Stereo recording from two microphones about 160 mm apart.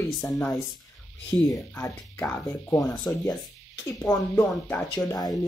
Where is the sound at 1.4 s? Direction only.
20° left (ahead or behind).